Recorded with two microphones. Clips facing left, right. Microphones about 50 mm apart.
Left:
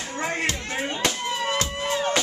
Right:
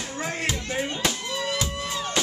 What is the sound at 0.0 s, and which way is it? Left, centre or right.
Music, centre.